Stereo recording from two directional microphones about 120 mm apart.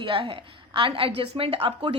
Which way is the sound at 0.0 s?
45° right (ahead or behind).